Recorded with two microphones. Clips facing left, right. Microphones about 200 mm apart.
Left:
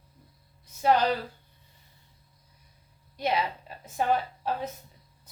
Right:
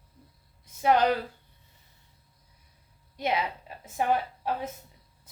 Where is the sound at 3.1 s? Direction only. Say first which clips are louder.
Left 1 dB; 20° right (ahead or behind).